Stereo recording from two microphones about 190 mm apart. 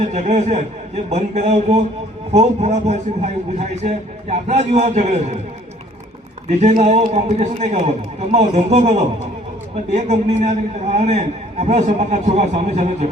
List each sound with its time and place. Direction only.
0.1 s a man's voice: 35° right (ahead or behind)
6.5 s a man's voice: 35° right (ahead or behind)